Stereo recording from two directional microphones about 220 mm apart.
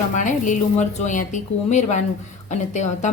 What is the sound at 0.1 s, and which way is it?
Speech, 35° left (ahead or behind).